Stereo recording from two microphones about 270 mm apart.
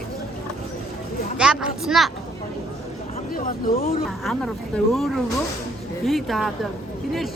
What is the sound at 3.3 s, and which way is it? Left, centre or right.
Speech, left.